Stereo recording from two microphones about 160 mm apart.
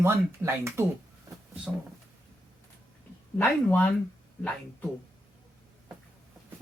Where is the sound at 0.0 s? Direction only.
15° right (ahead or behind).